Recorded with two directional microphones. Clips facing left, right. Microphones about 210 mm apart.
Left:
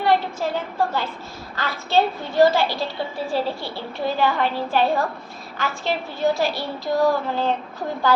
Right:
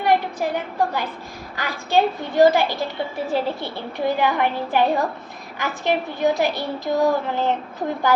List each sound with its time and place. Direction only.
0.0 s a woman's voice: 15° right (ahead or behind)